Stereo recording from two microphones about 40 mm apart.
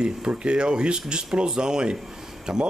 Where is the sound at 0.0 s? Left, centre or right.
Right.